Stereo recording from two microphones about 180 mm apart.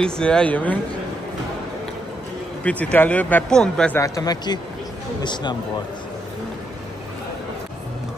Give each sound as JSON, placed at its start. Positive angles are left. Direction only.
{"t": 0.0, "sound": "speech", "side_deg": 5}
{"t": 2.6, "sound": "speech", "side_deg": 10}
{"t": 4.0, "sound": "speech", "side_deg": 20}